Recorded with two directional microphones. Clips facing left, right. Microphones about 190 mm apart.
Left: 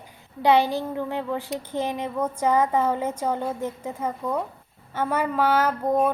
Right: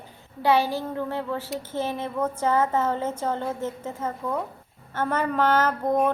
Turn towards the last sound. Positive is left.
turn(degrees=10)  # may be behind; listen again after turning